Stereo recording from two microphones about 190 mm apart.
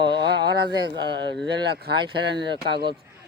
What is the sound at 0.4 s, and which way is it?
Speech, 20° right (ahead or behind).